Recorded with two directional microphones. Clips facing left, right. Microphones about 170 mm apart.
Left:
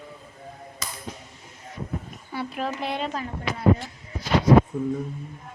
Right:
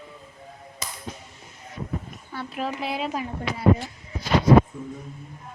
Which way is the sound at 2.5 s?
Centre (ahead or behind).